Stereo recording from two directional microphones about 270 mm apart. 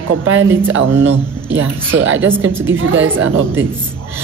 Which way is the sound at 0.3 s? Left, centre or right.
Right.